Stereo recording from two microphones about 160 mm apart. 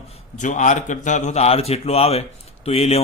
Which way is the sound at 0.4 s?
50° left (ahead or behind).